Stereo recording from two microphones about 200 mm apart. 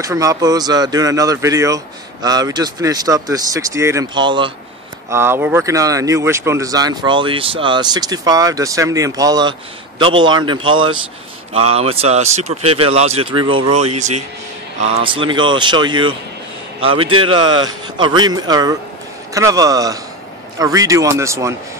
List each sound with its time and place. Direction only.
0.0 s speech: 15° right (ahead or behind)
5.1 s speech: 10° right (ahead or behind)